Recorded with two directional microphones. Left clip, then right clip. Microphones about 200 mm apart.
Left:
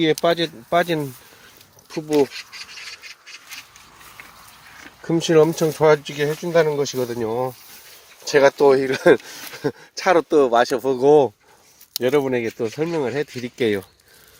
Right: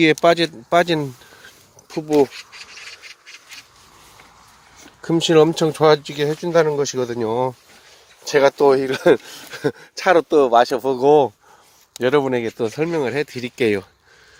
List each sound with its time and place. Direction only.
0.0 s speech: 20° right (ahead or behind)
2.6 s rub: 25° left (ahead or behind)
5.0 s speech: 10° right (ahead or behind)
7.3 s speech: 25° right (ahead or behind)
8.2 s speech: 10° left (ahead or behind)
12.0 s speech: 5° right (ahead or behind)